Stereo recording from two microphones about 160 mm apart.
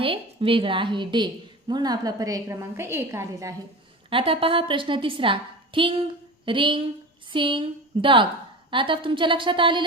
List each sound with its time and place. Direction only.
0.0 s a woman's voice: 35° right (ahead or behind); by 3.5 s 20° right (ahead or behind)
4.1 s a woman's voice: 35° right (ahead or behind)